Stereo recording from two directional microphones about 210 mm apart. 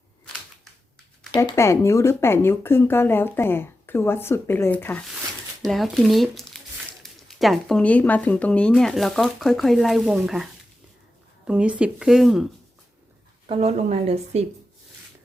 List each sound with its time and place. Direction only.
1.3 s speech: 15° left (ahead or behind); by 12.5 s centre (ahead or behind)
13.5 s speech: 30° right (ahead or behind)